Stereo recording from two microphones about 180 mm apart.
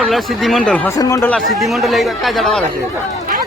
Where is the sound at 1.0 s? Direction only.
15° left (ahead or behind).